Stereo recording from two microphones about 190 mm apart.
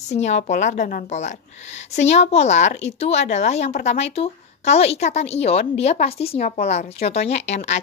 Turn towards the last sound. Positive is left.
turn(degrees=40)  # may be behind; listen again after turning